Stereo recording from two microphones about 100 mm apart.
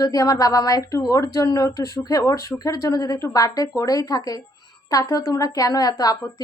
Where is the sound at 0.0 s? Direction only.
35° left (ahead or behind).